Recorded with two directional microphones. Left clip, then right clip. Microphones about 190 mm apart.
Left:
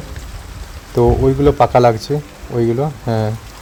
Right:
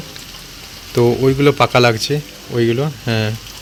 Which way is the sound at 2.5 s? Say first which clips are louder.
Even; 20° right (ahead or behind).